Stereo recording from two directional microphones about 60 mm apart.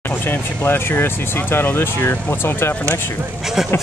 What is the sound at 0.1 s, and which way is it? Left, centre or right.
Speech, left.